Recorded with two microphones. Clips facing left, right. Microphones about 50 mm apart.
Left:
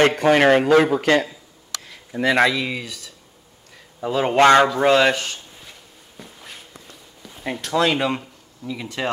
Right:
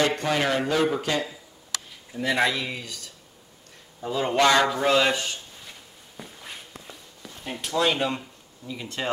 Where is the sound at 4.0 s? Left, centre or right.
Left.